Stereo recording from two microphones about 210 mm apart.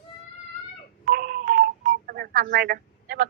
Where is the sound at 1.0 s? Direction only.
45° right (ahead or behind).